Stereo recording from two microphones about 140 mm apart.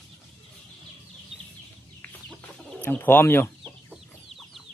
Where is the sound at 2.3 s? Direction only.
5° left (ahead or behind).